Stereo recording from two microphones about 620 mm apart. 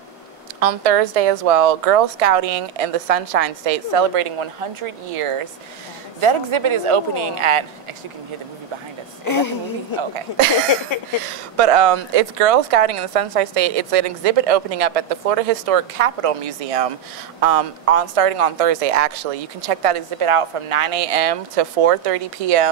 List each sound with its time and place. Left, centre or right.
0.6 s speech: right
9.2 s a woman's voice: left
11.5 s speech: right